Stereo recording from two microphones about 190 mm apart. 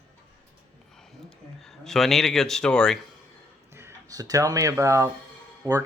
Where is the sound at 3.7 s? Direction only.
15° right (ahead or behind).